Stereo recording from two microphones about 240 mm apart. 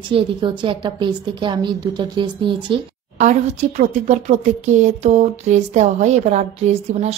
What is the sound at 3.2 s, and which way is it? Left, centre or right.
A woman's voice, right.